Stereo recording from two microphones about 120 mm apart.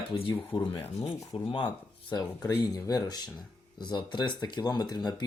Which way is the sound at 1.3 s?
45° left (ahead or behind).